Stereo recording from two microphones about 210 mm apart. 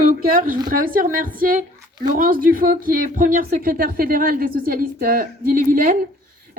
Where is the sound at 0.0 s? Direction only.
45° right (ahead or behind).